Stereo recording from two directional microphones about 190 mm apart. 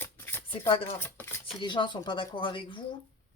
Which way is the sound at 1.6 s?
25° left (ahead or behind).